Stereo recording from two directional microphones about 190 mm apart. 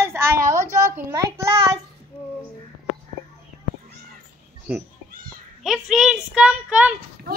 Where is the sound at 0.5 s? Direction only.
40° right (ahead or behind).